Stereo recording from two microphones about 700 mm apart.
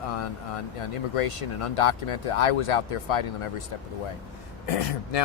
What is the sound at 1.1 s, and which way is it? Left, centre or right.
Speech, left.